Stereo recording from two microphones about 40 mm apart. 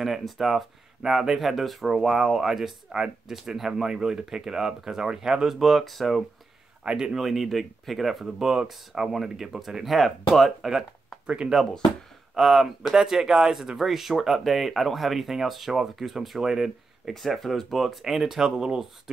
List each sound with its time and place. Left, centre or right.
0.0 s speech: centre
5.6 s speech: centre
6.8 s speech: right
7.2 s speech: centre
8.5 s speech: centre
11.5 s speech: centre
17.1 s speech: centre